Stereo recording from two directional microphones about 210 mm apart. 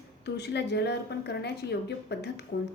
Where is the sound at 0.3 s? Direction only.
55° left (ahead or behind).